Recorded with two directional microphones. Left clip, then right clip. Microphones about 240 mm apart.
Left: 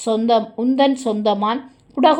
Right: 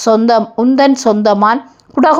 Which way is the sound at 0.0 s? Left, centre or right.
Right.